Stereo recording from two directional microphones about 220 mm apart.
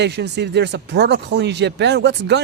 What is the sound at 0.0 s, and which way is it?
Speech, 50° right (ahead or behind).